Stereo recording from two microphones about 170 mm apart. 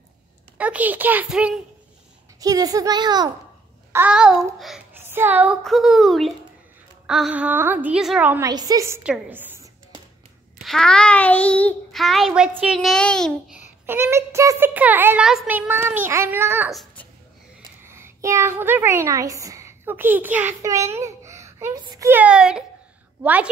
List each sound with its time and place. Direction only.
0.6 s a child's voice: 10° right (ahead or behind)
2.4 s a child's voice: 20° right (ahead or behind)
3.9 s a child's voice: 10° right (ahead or behind)
5.0 s a child's voice: 15° right (ahead or behind)
8.5 s a child's voice: 20° right (ahead or behind)
10.6 s a child's voice: centre (ahead or behind)
13.6 s a child's voice: 10° right (ahead or behind)
16.7 s babbling: 10° left (ahead or behind)
17.8 s a child's voice: 15° right (ahead or behind)